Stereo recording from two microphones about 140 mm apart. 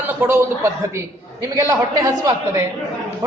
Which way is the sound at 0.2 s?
15° right (ahead or behind).